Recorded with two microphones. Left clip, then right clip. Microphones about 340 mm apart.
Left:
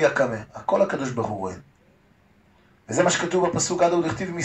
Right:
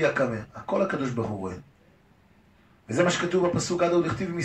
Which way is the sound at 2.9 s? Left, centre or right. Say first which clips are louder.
Left 3 dB; centre.